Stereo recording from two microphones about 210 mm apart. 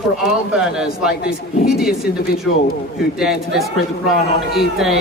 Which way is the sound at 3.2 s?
Centre (ahead or behind).